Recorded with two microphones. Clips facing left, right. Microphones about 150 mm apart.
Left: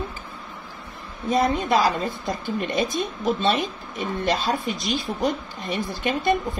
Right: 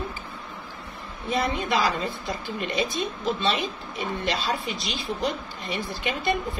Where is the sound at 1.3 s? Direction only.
45° left (ahead or behind).